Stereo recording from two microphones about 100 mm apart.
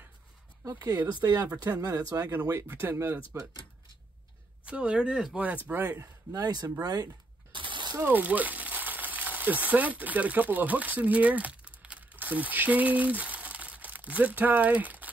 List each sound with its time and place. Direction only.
0.7 s speech: 40° right (ahead or behind); by 3.2 s 20° right (ahead or behind)
4.6 s speech: 10° right (ahead or behind)
6.3 s speech: 40° right (ahead or behind)
7.5 s a sound: 55° right (ahead or behind)
8.0 s speech: 15° right (ahead or behind)